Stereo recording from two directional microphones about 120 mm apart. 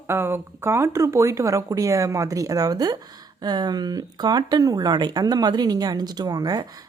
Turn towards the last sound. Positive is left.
turn(degrees=-30)  # may be behind; listen again after turning